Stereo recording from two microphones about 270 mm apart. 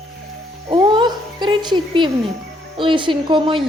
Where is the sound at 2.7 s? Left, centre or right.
Centre.